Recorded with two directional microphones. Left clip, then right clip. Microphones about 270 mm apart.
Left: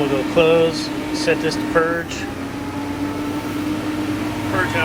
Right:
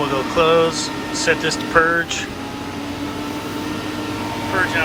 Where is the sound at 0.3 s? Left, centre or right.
Centre.